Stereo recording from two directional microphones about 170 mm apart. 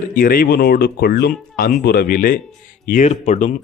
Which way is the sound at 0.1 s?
60° left (ahead or behind).